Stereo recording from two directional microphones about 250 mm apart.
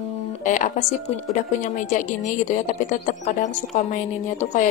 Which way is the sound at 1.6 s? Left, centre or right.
Left.